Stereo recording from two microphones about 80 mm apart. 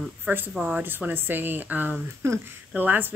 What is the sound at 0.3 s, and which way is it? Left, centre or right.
Speech, right.